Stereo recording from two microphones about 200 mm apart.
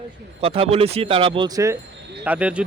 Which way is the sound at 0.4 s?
30° right (ahead or behind).